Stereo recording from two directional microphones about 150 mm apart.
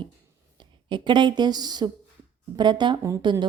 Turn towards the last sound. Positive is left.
turn(degrees=-30)  # may be behind; listen again after turning